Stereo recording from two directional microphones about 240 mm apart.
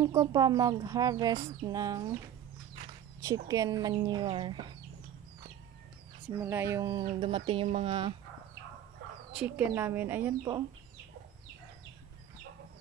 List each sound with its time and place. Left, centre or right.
0.0 s speech: centre
3.3 s speech: centre
6.3 s speech: centre
9.3 s speech: centre